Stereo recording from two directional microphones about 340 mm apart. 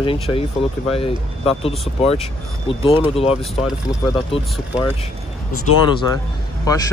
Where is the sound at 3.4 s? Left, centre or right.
Centre.